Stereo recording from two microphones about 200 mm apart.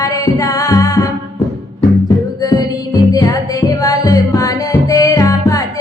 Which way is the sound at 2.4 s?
20° left (ahead or behind).